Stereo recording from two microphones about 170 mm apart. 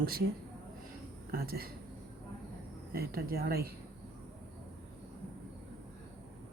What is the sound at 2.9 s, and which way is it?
Speech, 60° right (ahead or behind).